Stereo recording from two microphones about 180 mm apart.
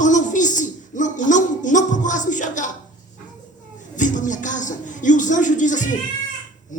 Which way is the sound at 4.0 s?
45° left (ahead or behind).